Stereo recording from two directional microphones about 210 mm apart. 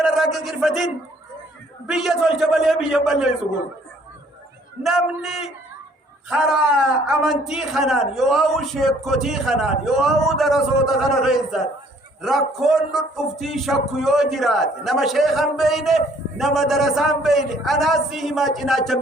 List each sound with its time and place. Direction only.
0.0 s a man's voice: centre (ahead or behind)
1.9 s speech: centre (ahead or behind)
4.8 s speech: centre (ahead or behind)